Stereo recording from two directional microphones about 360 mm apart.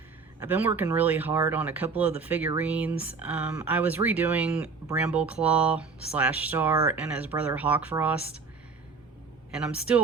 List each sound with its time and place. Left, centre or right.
0.3 s speech: centre
9.5 s speech: centre